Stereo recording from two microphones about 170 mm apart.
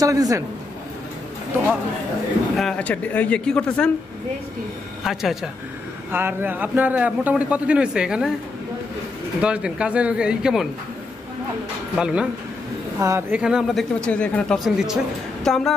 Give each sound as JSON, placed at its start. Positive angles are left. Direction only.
{"t": 0.0, "sound": "a woman's voice", "side_deg": -20}
{"t": 2.5, "sound": "speech", "side_deg": 5}
{"t": 5.0, "sound": "a man's voice", "side_deg": 0}
{"t": 9.4, "sound": "speech", "side_deg": -5}
{"t": 12.0, "sound": "speech", "side_deg": -5}
{"t": 13.0, "sound": "a man's voice", "side_deg": -15}
{"t": 13.4, "sound": "a woman's voice", "side_deg": -5}